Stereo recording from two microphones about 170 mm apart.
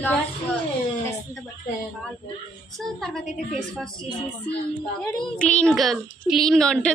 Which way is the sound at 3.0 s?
Centre (ahead or behind).